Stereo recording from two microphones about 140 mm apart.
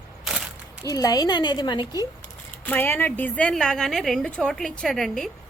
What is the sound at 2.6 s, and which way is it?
A woman's voice, 15° left (ahead or behind).